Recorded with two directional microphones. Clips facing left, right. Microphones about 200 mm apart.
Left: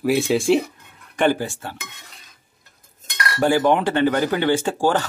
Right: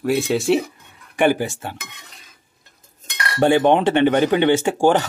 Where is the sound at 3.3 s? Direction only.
20° right (ahead or behind).